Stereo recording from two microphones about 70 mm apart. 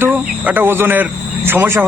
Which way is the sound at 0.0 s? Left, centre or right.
Right.